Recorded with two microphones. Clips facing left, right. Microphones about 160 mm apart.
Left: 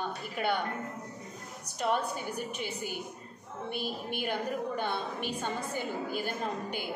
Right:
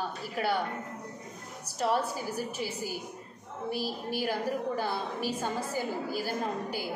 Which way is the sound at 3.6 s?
35° right (ahead or behind).